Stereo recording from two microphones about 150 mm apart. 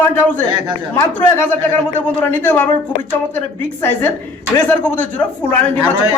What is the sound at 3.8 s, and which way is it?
Speech, 15° left (ahead or behind).